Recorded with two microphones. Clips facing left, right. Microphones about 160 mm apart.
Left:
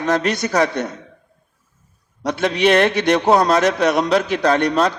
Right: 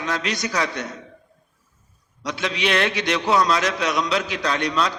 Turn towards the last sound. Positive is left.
turn(degrees=50)  # may be behind; listen again after turning